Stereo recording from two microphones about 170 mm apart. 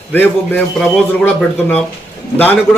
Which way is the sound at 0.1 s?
10° left (ahead or behind).